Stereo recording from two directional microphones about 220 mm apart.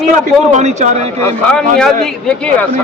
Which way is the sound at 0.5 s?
30° right (ahead or behind).